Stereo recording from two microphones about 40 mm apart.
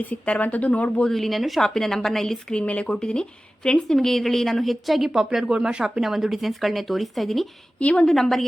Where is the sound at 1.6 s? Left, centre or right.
Centre.